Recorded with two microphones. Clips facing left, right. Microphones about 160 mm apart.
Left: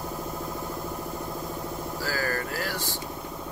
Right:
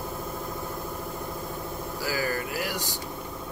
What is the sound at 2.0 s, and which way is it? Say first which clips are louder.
Vehicle: right 1 dB; 15° right (ahead or behind).